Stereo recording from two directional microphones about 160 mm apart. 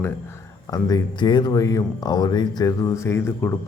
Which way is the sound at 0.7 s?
25° left (ahead or behind).